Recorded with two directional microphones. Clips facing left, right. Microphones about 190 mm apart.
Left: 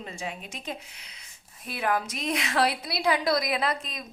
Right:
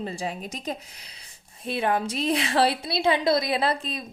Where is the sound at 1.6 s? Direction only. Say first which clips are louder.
Right 3 dB; 25° right (ahead or behind).